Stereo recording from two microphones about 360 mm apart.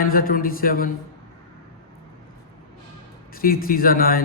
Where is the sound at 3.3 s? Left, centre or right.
Left.